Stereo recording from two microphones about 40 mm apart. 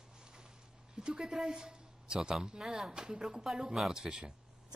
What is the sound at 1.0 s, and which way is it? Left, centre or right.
A man's voice, centre.